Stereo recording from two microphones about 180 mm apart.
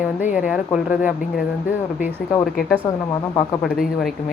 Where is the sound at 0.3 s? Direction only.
5° right (ahead or behind).